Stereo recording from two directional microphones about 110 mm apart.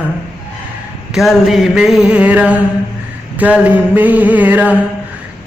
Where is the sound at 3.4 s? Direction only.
15° right (ahead or behind).